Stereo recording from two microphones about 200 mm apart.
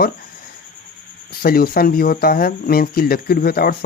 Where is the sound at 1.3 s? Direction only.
50° left (ahead or behind).